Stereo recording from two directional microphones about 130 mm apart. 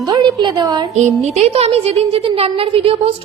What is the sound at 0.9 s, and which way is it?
A woman's voice, 60° right (ahead or behind).